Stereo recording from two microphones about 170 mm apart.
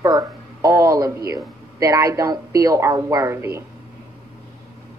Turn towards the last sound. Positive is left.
turn(degrees=-15)  # may be behind; listen again after turning